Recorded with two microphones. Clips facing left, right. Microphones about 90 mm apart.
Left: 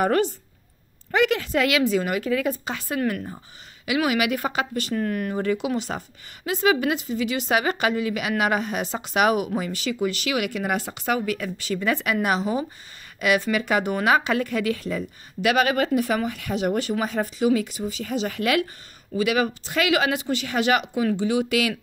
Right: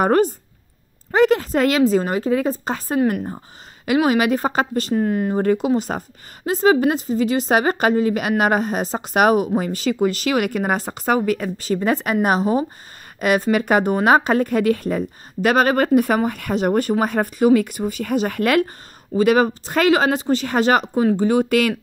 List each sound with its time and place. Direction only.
0.0 s a woman's voice: 45° right (ahead or behind)
4.9 s speech: 25° right (ahead or behind)
5.4 s a woman's voice: 45° right (ahead or behind)